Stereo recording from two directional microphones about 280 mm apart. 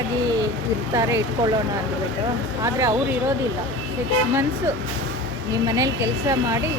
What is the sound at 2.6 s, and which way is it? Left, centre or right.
Speech, centre.